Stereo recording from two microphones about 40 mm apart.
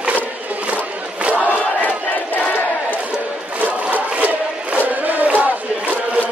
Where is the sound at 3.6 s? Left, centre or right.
Right.